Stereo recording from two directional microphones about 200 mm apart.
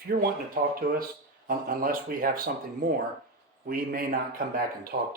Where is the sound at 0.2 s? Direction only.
45° right (ahead or behind).